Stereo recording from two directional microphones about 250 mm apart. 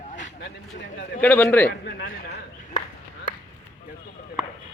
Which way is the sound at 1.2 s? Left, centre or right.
Centre.